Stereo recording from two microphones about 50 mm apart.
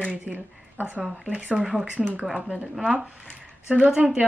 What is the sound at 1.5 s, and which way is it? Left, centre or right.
Speech, centre.